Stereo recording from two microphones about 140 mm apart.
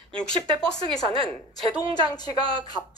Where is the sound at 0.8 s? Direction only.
40° right (ahead or behind).